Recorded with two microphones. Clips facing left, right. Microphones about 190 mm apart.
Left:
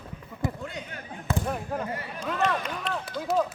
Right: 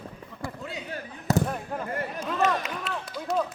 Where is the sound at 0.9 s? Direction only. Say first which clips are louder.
Right 7 dB; 40° right (ahead or behind).